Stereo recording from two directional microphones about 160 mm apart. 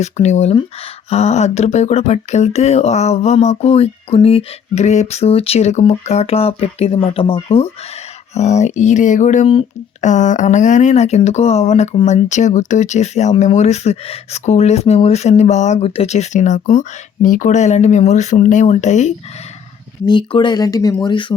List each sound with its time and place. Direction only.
0.0 s speech: 45° left (ahead or behind)
20.1 s speech: 30° left (ahead or behind)